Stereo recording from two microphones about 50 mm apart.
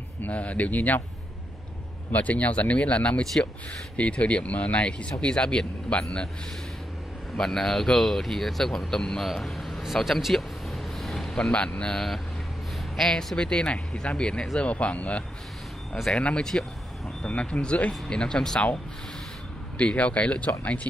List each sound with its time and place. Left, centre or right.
0.2 s speech: left
2.1 s speech: left
7.3 s speech: centre
9.2 s vehicle: centre
11.8 s speech: centre
13.4 s speech: left
14.6 s speech: left
19.8 s speech: left